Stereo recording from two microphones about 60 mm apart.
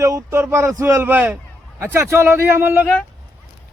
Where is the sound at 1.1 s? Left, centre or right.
Right.